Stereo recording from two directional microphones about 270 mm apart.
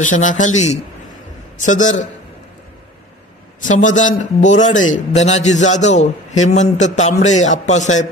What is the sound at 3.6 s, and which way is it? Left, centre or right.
A man's voice, left.